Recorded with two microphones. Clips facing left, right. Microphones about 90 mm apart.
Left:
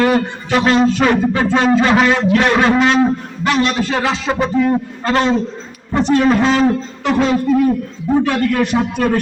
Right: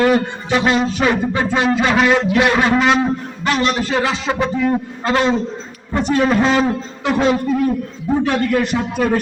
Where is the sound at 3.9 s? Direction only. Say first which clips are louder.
Left 1 dB; 5° right (ahead or behind).